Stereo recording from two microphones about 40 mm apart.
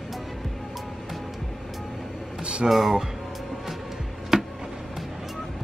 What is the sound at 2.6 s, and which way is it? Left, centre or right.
Speech, centre.